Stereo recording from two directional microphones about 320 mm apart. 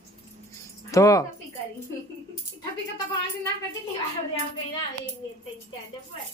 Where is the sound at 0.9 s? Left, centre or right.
Centre.